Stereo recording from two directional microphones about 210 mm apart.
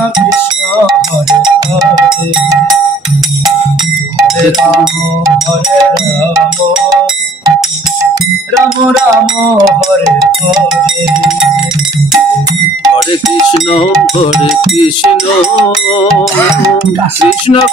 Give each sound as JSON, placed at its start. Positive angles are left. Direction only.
{"t": 9.6, "sound": "music", "side_deg": -15}
{"t": 13.7, "sound": "speech", "side_deg": 25}